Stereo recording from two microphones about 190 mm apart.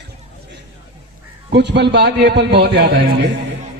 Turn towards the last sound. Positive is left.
turn(degrees=-60)  # may be behind; listen again after turning